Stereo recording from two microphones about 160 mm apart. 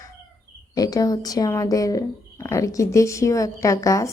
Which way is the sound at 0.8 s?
25° left (ahead or behind).